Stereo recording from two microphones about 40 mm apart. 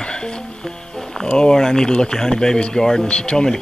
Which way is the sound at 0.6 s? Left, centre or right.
Centre.